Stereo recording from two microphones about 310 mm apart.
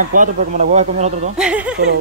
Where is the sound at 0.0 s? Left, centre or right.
Right.